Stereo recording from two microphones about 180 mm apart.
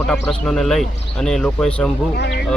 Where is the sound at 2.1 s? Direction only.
70° left (ahead or behind).